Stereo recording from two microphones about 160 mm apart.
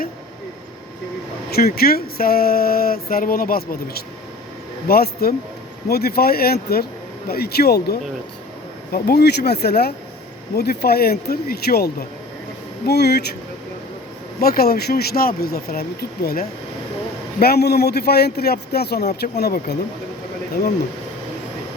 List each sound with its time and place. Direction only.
1.5 s a man's voice: 75° left (ahead or behind)
12.8 s a man's voice: 90° left
14.4 s speech: 70° left (ahead or behind)
17.4 s a man's voice: 85° left